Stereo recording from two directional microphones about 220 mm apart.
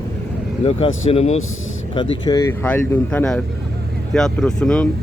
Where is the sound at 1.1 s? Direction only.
30° left (ahead or behind).